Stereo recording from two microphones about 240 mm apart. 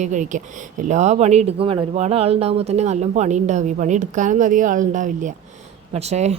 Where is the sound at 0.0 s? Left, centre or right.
Right.